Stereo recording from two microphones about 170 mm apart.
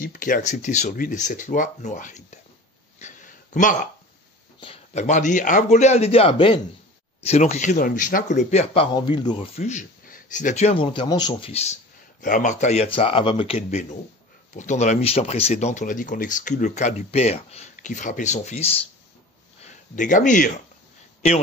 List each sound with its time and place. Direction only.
0.0 s speech: 55° left (ahead or behind)
3.0 s a sound: 45° left (ahead or behind)
4.6 s a sound: 35° left (ahead or behind)
5.0 s speech: 45° left (ahead or behind)
8.9 s speech: 25° left (ahead or behind)
9.6 s speech: 45° left (ahead or behind); by 11.5 s 25° left (ahead or behind)
11.5 s speech: 40° left (ahead or behind)
19.6 s speech: 50° left (ahead or behind)